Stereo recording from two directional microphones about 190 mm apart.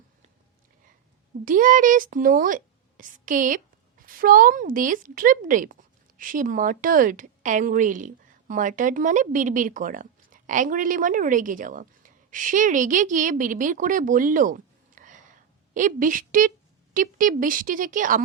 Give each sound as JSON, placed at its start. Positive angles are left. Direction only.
{"t": 1.5, "sound": "a woman's voice", "side_deg": -45}